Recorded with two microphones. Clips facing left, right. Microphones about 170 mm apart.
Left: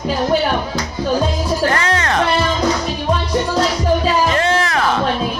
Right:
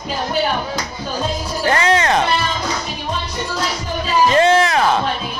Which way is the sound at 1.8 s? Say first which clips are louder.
Right 2 dB; 20° right (ahead or behind).